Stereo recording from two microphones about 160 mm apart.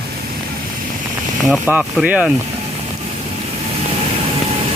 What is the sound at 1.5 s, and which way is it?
Speech, 5° right (ahead or behind).